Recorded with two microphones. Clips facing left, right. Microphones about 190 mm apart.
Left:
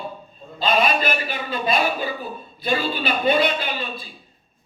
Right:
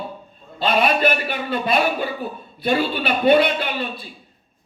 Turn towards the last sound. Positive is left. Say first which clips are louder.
# right 3 dB
turn(degrees=-60)  # may be behind; listen again after turning